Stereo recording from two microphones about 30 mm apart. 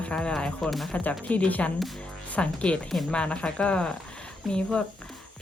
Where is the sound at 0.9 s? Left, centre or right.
Left.